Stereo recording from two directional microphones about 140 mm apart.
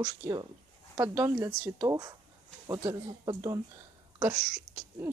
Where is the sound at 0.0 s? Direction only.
30° right (ahead or behind).